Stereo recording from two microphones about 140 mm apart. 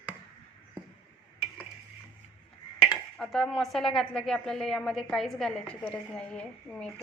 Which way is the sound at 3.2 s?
5° left (ahead or behind).